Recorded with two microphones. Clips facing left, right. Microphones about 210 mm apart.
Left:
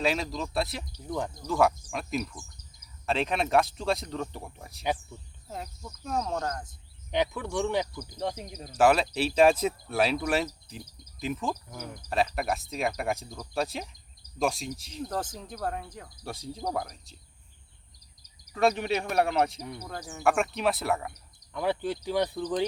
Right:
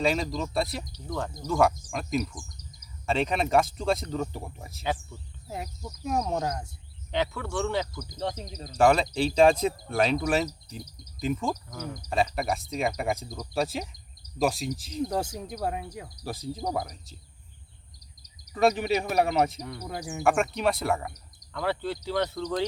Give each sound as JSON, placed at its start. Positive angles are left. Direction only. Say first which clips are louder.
{"t": 0.0, "sound": "speech", "louder": "right 2 dB", "side_deg": 0}
{"t": 5.5, "sound": "cricket", "louder": "right 3 dB", "side_deg": -10}
{"t": 7.1, "sound": "speech", "louder": "left 1 dB", "side_deg": 15}
{"t": 13.2, "sound": "cricket", "louder": "right 3 dB", "side_deg": -15}
{"t": 13.5, "sound": "speech", "louder": "right 2 dB", "side_deg": 0}
{"t": 15.0, "sound": "cricket", "louder": "right 4 dB", "side_deg": -10}
{"t": 18.5, "sound": "speech", "louder": "right 2 dB", "side_deg": 0}
{"t": 19.8, "sound": "cricket", "louder": "right 4 dB", "side_deg": -10}
{"t": 20.2, "sound": "speech", "louder": "right 1 dB", "side_deg": 0}
{"t": 21.5, "sound": "speech", "louder": "left 1 dB", "side_deg": 15}